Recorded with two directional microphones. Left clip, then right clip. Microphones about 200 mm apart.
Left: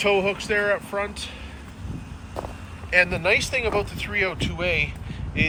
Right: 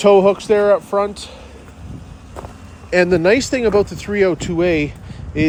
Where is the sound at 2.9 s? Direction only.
45° right (ahead or behind).